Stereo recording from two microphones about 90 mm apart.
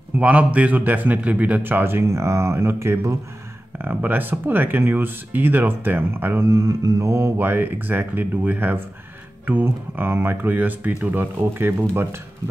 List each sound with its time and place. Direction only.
0.2 s a man's voice: 15° right (ahead or behind); by 3.2 s 30° right (ahead or behind)
3.7 s a man's voice: 20° right (ahead or behind)
6.5 s a man's voice: 40° right (ahead or behind)